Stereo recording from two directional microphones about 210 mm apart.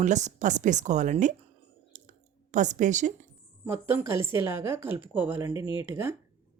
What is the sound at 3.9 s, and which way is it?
A woman's voice, 10° right (ahead or behind).